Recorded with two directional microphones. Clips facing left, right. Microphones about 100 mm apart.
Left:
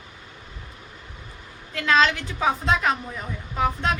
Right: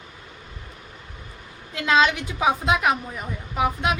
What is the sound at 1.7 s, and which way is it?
A woman's voice, 15° right (ahead or behind).